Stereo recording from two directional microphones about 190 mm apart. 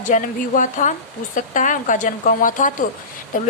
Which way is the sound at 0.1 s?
45° left (ahead or behind).